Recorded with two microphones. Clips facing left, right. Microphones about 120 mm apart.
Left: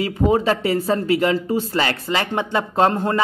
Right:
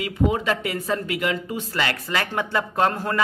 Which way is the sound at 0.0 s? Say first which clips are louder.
Left 5 dB; 35° left (ahead or behind).